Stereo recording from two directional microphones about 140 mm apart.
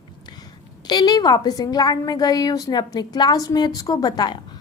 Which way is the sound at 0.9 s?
30° left (ahead or behind).